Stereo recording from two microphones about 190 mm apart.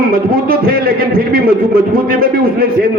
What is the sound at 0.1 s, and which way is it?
A man's voice, 50° right (ahead or behind).